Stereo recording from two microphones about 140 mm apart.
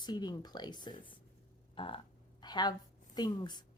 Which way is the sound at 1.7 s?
40° left (ahead or behind).